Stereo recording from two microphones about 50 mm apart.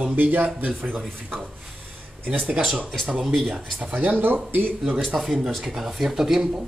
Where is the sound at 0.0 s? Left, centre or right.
Right.